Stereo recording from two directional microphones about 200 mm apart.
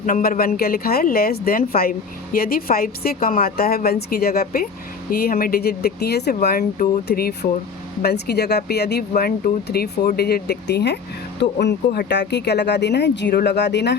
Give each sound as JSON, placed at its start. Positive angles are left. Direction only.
{"t": 0.0, "sound": "speech", "side_deg": 45}